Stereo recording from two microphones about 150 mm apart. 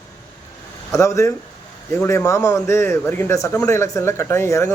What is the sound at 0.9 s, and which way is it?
A man's voice, 20° left (ahead or behind).